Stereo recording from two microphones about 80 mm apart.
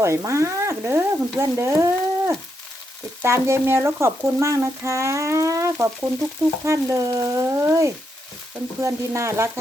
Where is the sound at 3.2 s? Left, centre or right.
Right.